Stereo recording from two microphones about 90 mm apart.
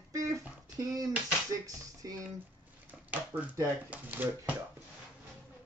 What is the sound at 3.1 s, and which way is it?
Speech, 15° right (ahead or behind).